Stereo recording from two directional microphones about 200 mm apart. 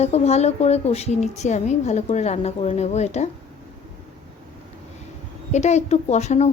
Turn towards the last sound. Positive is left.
turn(degrees=35)  # may be behind; listen again after turning